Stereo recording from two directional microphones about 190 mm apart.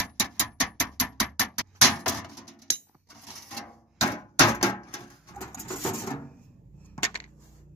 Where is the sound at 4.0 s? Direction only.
15° left (ahead or behind).